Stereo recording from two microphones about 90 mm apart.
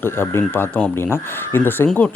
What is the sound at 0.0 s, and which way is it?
Speech, 25° left (ahead or behind).